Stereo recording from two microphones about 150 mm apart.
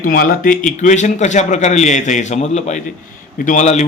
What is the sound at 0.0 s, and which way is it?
Speech, 70° left (ahead or behind).